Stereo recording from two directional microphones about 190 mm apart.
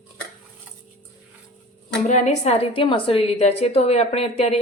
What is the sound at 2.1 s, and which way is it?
A woman's voice, 35° left (ahead or behind).